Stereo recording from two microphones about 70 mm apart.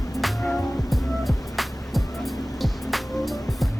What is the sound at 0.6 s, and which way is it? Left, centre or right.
Music, left.